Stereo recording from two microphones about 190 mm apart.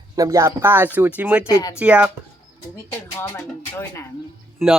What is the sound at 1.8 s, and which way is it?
Speech, 5° right (ahead or behind).